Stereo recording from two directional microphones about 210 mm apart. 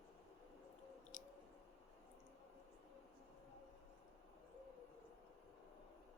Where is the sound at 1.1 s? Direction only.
40° left (ahead or behind).